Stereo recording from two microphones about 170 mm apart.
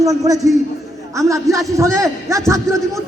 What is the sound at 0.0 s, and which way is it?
A man's voice, 20° right (ahead or behind).